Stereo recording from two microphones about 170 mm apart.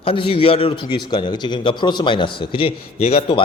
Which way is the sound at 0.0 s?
30° left (ahead or behind).